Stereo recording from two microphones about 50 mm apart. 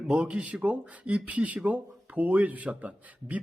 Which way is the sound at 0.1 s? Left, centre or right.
Right.